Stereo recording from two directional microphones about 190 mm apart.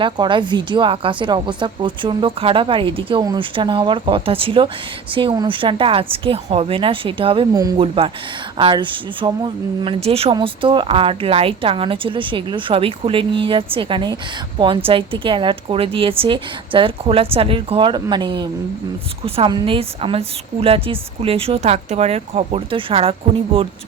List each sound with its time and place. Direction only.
0.0 s a woman's voice: 25° right (ahead or behind)